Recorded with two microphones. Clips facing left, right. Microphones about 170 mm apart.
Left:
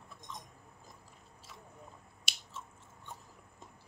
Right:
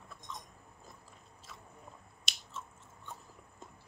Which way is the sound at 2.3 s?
10° left (ahead or behind).